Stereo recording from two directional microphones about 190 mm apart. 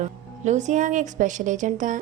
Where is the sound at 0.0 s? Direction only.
40° right (ahead or behind).